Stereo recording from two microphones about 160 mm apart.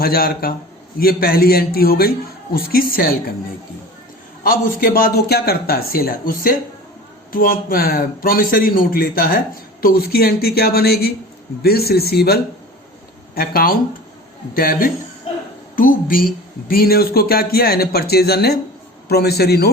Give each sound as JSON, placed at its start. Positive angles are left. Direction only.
{"t": 0.0, "sound": "speech", "side_deg": 70}
{"t": 4.4, "sound": "a man's voice", "side_deg": 60}